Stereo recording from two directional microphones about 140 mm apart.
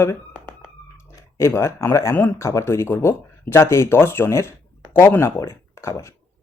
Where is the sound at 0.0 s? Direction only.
20° left (ahead or behind).